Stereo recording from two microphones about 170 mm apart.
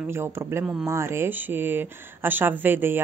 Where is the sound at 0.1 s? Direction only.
15° right (ahead or behind).